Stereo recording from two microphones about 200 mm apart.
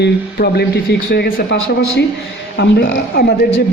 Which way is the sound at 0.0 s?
50° left (ahead or behind).